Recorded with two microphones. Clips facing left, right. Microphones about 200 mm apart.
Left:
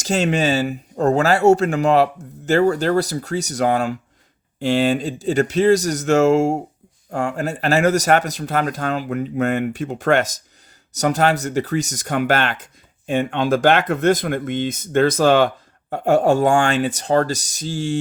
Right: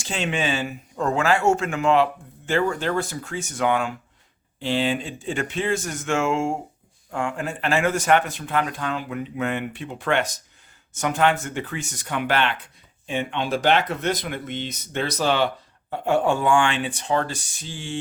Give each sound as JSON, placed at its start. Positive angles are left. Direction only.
{"t": 0.0, "sound": "speech", "side_deg": 40}